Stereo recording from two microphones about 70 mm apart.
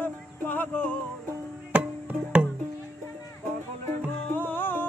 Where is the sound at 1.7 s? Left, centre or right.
Centre.